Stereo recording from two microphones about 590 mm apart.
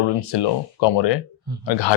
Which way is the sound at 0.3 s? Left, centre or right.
Left.